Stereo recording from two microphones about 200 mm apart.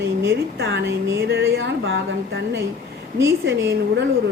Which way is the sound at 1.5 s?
70° right (ahead or behind).